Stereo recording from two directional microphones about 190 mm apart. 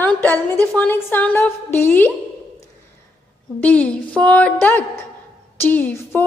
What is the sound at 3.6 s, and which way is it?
A woman's voice, 5° left (ahead or behind).